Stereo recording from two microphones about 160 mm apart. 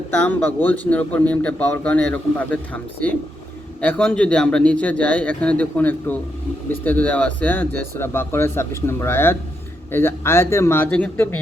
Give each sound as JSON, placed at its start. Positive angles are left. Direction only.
{"t": 0.2, "sound": "speech", "side_deg": 10}